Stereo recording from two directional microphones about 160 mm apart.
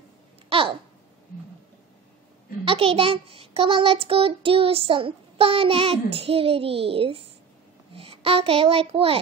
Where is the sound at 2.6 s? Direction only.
35° right (ahead or behind).